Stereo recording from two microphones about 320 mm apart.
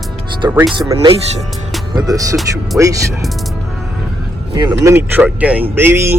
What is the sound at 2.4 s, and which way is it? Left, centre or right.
Speech, centre.